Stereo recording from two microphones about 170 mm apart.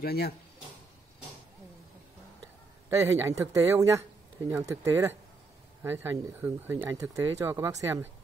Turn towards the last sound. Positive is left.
turn(degrees=-15)  # may be behind; listen again after turning